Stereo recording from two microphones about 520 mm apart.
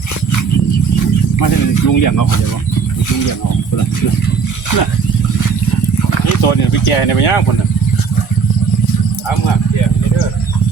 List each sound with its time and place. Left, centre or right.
1.4 s speech: left
6.4 s speech: left